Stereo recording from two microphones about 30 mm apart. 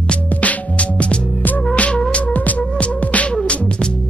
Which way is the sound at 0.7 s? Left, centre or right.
Left.